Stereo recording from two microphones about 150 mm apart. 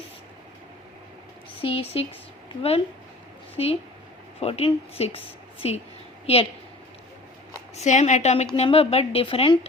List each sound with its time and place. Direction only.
1.6 s speech: 40° left (ahead or behind)
4.4 s a woman's voice: 40° left (ahead or behind)
7.8 s a woman's voice: 50° left (ahead or behind)